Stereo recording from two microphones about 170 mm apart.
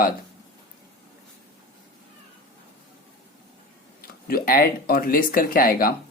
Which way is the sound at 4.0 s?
60° left (ahead or behind).